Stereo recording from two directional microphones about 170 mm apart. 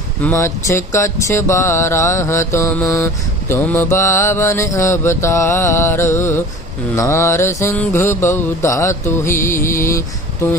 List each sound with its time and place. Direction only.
0.2 s music: 15° left (ahead or behind)